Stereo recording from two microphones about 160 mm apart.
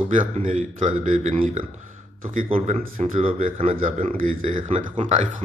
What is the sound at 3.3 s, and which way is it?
Speech, 55° right (ahead or behind).